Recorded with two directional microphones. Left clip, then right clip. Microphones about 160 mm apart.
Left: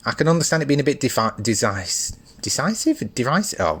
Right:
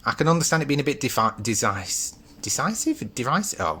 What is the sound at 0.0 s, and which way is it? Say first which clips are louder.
Speech: left 2 dB; 30° left (ahead or behind).